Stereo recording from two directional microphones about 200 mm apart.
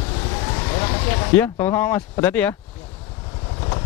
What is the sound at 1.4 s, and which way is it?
Speech, 10° left (ahead or behind).